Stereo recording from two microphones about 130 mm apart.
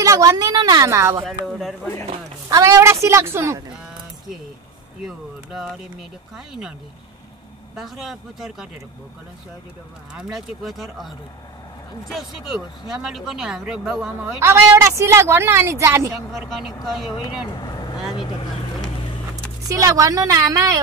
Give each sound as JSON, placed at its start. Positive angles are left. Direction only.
{"t": 0.0, "sound": "speech", "side_deg": -25}
{"t": 1.2, "sound": "speech", "side_deg": 0}
{"t": 2.6, "sound": "speech", "side_deg": -20}
{"t": 5.0, "sound": "speech", "side_deg": 0}
{"t": 7.7, "sound": "speech", "side_deg": 0}
{"t": 10.1, "sound": "speech", "side_deg": -5}
{"t": 12.1, "sound": "speech", "side_deg": 0}
{"t": 14.4, "sound": "speech", "side_deg": -20}
{"t": 16.3, "sound": "speech", "side_deg": 0}
{"t": 17.5, "sound": "speech", "side_deg": 30}
{"t": 19.7, "sound": "speech", "side_deg": -25}